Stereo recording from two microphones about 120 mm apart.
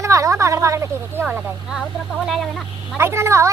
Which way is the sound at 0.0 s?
25° right (ahead or behind).